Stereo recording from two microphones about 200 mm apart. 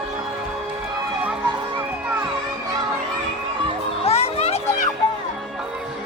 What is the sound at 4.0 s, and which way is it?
Children playing, 30° left (ahead or behind).